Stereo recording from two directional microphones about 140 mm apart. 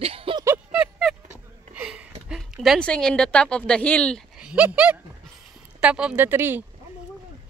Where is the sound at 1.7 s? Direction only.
5° right (ahead or behind).